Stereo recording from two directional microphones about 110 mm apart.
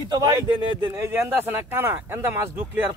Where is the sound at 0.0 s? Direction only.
35° right (ahead or behind).